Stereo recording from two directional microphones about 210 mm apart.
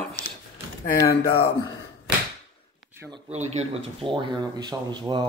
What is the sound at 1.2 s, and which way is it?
Speech, 50° left (ahead or behind).